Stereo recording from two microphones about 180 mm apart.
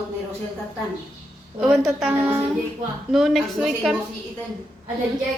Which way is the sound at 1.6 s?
Centre (ahead or behind).